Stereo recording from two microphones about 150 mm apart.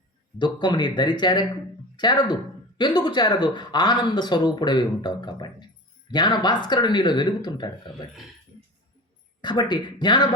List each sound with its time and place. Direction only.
0.3 s speech: 30° left (ahead or behind)
9.4 s speech: 30° left (ahead or behind)